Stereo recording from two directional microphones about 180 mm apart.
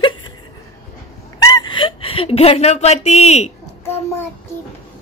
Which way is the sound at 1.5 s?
25° left (ahead or behind).